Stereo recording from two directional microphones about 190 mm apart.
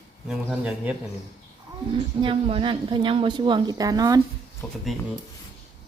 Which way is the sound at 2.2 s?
30° right (ahead or behind).